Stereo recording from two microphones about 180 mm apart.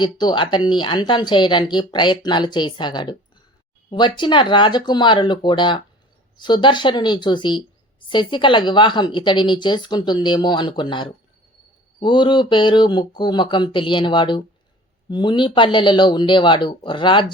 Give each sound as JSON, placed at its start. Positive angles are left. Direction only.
{"t": 0.0, "sound": "speech", "side_deg": 25}